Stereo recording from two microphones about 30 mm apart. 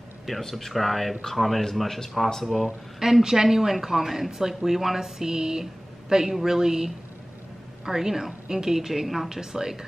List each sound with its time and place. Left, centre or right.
0.3 s speech: centre
3.0 s a woman's voice: centre
9.3 s speech: centre